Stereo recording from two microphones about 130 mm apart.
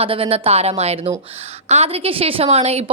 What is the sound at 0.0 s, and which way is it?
A woman's voice, 50° right (ahead or behind).